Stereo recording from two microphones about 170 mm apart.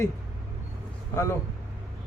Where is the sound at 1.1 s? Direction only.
15° left (ahead or behind).